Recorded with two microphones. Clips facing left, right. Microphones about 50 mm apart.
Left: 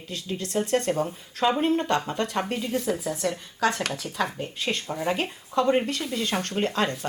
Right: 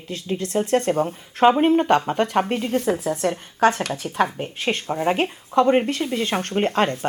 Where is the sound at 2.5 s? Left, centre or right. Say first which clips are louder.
Right 5 dB; right.